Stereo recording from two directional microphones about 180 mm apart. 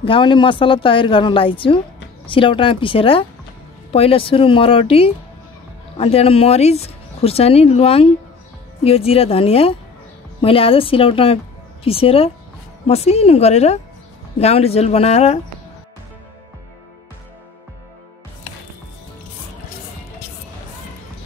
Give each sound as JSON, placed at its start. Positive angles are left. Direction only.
{"t": 0.0, "sound": "a woman's voice", "side_deg": 30}